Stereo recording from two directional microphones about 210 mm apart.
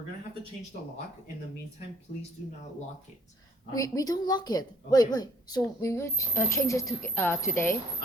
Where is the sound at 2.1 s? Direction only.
30° left (ahead or behind).